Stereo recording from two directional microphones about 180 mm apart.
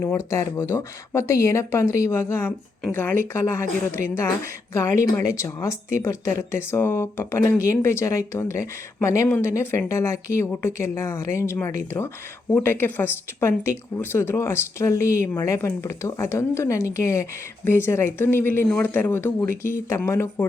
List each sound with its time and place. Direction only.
0.0 s speech: 15° left (ahead or behind)